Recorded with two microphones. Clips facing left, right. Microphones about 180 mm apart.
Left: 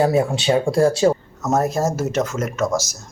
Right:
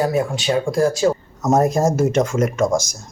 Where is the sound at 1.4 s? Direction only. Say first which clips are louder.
Right 4 dB; 10° right (ahead or behind).